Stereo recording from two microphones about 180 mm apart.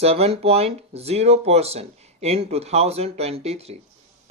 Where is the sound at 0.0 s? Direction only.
35° right (ahead or behind).